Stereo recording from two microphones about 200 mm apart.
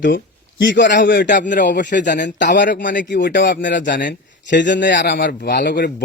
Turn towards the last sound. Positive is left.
turn(degrees=55)  # may be behind; listen again after turning